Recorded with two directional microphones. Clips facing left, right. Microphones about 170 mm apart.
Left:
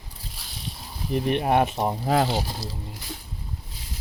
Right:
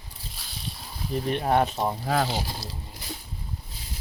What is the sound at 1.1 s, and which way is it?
Speech, 20° left (ahead or behind).